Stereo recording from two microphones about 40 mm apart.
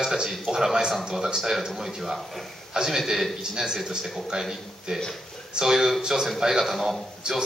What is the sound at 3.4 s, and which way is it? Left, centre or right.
A man's voice, centre.